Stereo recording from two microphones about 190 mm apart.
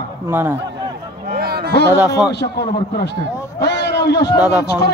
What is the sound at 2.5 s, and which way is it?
Speech, 60° left (ahead or behind).